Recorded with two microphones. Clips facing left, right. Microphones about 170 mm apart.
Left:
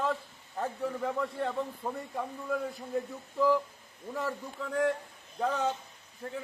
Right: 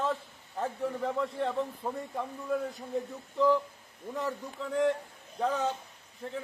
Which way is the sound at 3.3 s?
5° left (ahead or behind).